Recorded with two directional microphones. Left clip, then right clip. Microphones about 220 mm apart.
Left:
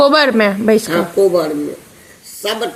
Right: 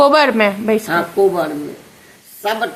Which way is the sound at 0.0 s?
15° left (ahead or behind).